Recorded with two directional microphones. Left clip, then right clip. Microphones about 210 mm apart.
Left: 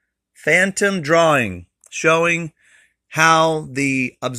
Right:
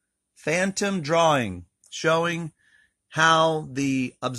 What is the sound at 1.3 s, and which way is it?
Speech, 30° left (ahead or behind).